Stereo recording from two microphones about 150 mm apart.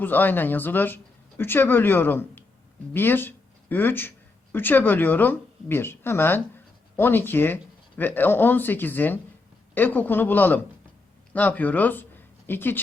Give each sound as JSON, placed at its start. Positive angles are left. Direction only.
{"t": 0.0, "sound": "speech", "side_deg": 15}